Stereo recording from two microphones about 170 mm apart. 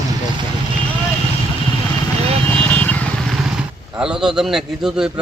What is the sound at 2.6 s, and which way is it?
Vehicle, 10° left (ahead or behind).